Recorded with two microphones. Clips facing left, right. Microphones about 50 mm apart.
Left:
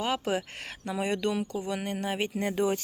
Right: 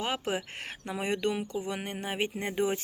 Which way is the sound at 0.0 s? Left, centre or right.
Right.